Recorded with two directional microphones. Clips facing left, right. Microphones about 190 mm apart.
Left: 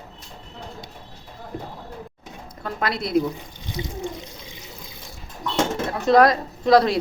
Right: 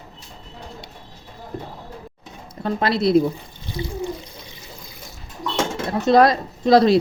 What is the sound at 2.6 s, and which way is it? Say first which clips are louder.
Speech: right 7 dB; 25° right (ahead or behind).